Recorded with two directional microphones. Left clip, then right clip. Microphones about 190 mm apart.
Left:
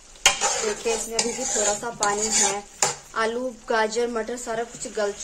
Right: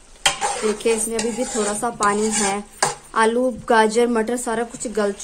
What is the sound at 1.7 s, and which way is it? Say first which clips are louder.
A woman's voice: right 4 dB; 40° right (ahead or behind).